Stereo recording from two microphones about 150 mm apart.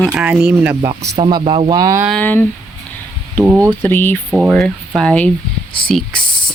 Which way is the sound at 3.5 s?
20° right (ahead or behind).